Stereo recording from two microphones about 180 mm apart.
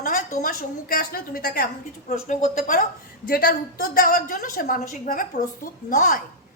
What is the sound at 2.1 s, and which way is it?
A woman's voice, 45° left (ahead or behind).